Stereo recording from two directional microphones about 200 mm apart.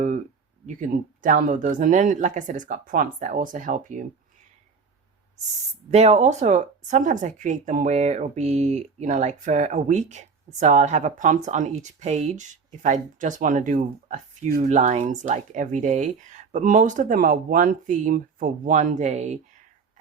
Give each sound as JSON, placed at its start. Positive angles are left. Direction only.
{"t": 0.7, "sound": "speech", "side_deg": -40}
{"t": 5.9, "sound": "speech", "side_deg": -35}